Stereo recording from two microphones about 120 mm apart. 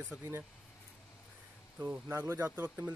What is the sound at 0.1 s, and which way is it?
Speech, 15° right (ahead or behind).